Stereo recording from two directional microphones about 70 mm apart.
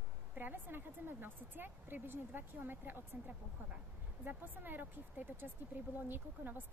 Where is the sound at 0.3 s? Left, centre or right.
Right.